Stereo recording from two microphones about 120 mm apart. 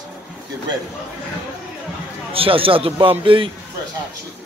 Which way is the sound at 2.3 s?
50° right (ahead or behind).